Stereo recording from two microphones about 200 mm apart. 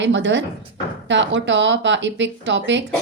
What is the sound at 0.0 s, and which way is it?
Speech, 65° right (ahead or behind).